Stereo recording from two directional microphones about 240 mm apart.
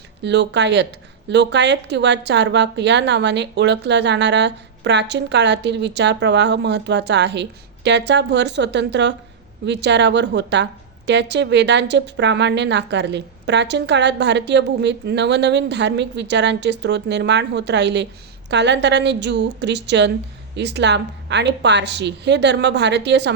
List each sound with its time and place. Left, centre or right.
0.2 s a woman's voice: right